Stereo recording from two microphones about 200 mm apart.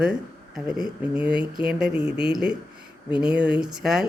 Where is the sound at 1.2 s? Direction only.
25° left (ahead or behind).